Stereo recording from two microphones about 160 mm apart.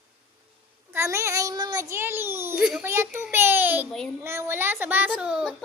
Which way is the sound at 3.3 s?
15° right (ahead or behind).